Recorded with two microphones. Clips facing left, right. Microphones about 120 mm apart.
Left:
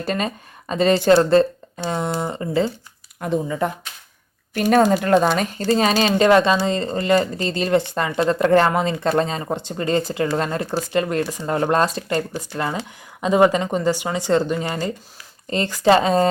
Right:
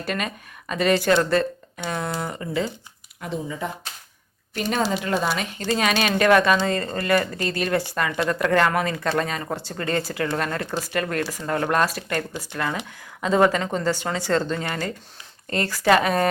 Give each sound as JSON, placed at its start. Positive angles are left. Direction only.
{"t": 0.0, "sound": "speech", "side_deg": 30}
{"t": 3.2, "sound": "speech", "side_deg": 50}
{"t": 4.7, "sound": "speech", "side_deg": 50}
{"t": 5.7, "sound": "speech", "side_deg": 30}
{"t": 13.2, "sound": "speech", "side_deg": 20}